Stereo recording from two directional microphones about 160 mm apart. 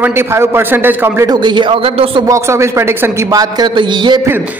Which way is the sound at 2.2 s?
20° right (ahead or behind).